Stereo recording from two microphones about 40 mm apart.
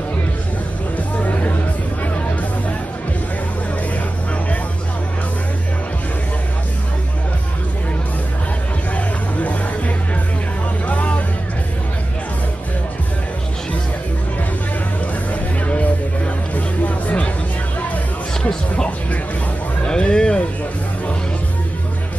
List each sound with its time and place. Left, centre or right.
0.9 s music: left
8.9 s music: left
15.6 s music: left
19.8 s music: left